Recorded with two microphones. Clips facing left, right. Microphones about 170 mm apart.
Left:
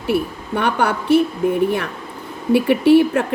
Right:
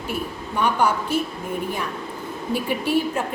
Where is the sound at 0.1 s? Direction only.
65° left (ahead or behind).